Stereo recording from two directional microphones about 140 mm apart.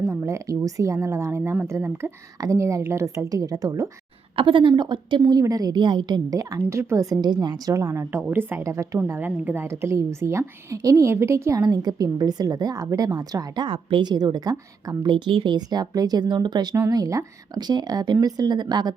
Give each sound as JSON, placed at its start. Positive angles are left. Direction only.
{"t": 0.0, "sound": "a woman's voice", "side_deg": -20}
{"t": 4.4, "sound": "a woman's voice", "side_deg": -35}